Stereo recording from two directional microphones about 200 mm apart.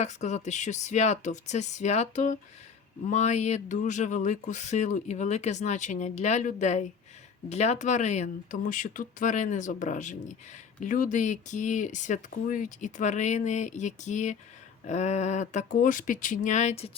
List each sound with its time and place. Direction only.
0.0 s speech: 35° left (ahead or behind)